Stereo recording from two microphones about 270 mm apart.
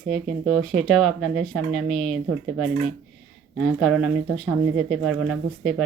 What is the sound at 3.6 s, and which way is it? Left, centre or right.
Speech, centre.